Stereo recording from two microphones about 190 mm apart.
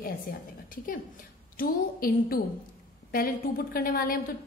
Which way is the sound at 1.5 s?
50° left (ahead or behind).